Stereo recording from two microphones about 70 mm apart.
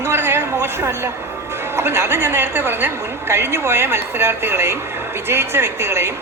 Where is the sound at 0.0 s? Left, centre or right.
Right.